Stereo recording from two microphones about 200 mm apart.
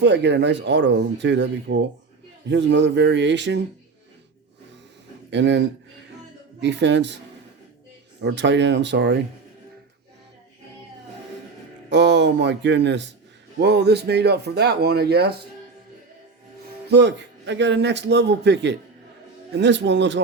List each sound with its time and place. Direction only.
0.0 s a man's voice: 60° right (ahead or behind)
5.3 s a man's voice: 60° right (ahead or behind)
8.2 s a man's voice: 60° right (ahead or behind)
11.9 s a man's voice: 60° right (ahead or behind)
16.9 s a man's voice: 60° right (ahead or behind)